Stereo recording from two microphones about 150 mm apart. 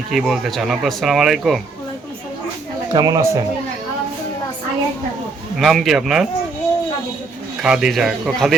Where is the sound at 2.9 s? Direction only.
25° right (ahead or behind).